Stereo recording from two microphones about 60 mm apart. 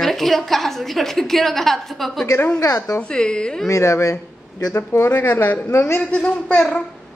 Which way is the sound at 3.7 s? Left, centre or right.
Left.